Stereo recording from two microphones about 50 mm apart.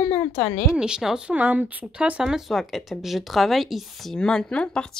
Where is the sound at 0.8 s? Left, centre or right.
Centre.